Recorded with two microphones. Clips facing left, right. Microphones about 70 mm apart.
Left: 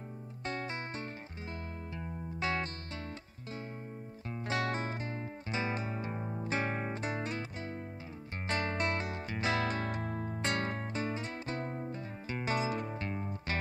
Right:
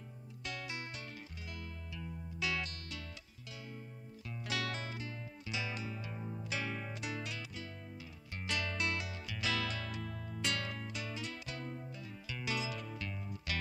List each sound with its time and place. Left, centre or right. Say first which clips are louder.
0.5 s music: left 6 dB; left
4.3 s music: left 6 dB; left